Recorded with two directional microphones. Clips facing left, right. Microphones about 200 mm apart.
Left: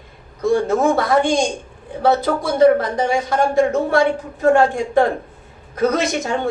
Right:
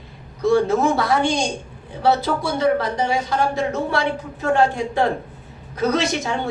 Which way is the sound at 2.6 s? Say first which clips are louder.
Left 7 dB; 50° left (ahead or behind).